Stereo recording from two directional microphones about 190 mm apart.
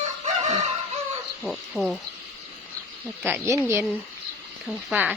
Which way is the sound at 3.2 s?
15° right (ahead or behind).